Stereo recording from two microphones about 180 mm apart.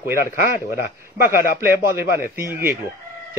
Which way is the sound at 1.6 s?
10° right (ahead or behind).